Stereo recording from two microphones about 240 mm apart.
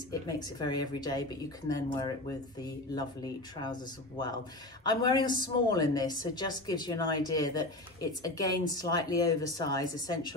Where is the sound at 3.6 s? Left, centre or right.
Centre.